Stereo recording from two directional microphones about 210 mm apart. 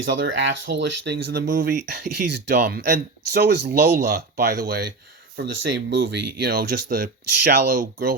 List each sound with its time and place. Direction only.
0.0 s speech: 60° right (ahead or behind); by 7.9 s 40° right (ahead or behind)